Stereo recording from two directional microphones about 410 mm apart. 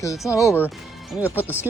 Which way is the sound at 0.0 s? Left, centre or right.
Centre.